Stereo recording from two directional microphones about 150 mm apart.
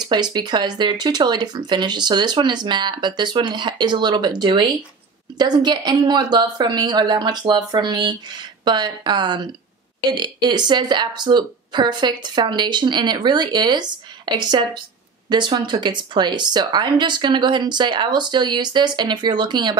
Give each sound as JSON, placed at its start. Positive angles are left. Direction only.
{"t": 0.0, "sound": "speech", "side_deg": -30}